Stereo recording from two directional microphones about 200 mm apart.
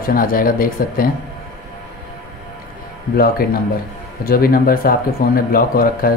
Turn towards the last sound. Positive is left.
turn(degrees=45)  # may be behind; listen again after turning